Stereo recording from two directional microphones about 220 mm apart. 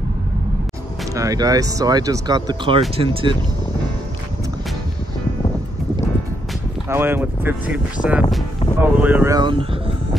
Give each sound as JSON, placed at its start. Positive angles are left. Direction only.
{"t": 1.1, "sound": "speech", "side_deg": -15}
{"t": 6.9, "sound": "speech", "side_deg": -10}